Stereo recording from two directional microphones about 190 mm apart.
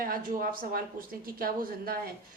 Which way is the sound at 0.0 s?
50° right (ahead or behind).